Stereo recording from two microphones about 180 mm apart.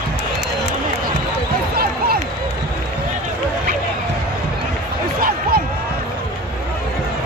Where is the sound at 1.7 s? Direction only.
55° right (ahead or behind).